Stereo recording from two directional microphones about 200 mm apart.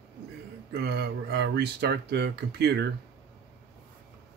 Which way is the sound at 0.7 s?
55° right (ahead or behind).